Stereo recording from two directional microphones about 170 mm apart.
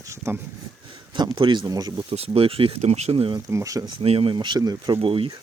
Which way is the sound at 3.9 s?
35° right (ahead or behind).